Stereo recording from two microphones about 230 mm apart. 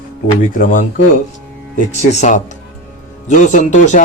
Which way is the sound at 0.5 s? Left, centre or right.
Left.